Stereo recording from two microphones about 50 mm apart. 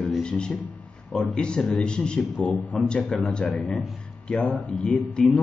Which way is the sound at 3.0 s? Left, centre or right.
Centre.